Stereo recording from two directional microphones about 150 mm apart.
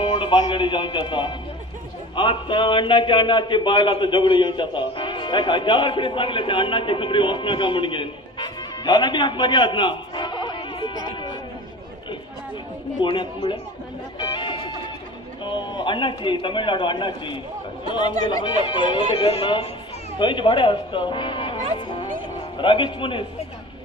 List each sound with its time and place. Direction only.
0.0 s a man's voice: 30° left (ahead or behind)
13.0 s a man's voice: 30° left (ahead or behind)
14.2 s music: 35° left (ahead or behind)
15.4 s a man's voice: 30° left (ahead or behind)